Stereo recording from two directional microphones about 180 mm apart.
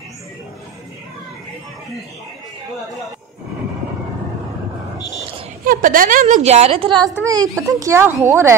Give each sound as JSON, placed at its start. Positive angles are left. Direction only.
{"t": 5.7, "sound": "a woman's voice", "side_deg": -50}